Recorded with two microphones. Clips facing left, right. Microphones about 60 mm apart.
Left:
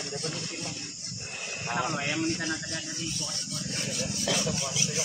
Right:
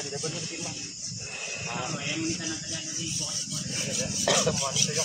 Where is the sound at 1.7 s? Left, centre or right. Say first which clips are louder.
Left 4 dB; left.